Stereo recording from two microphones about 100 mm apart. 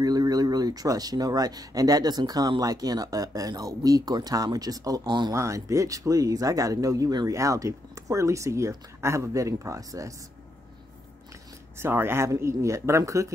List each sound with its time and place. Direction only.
0.0 s speech: 40° right (ahead or behind)
5.3 s speech: 30° right (ahead or behind)
11.8 s speech: 25° right (ahead or behind)